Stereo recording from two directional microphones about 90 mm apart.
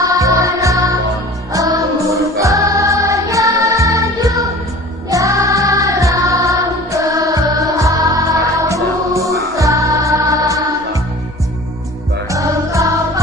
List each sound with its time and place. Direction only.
0.1 s music: 40° right (ahead or behind)
12.3 s music: 35° right (ahead or behind)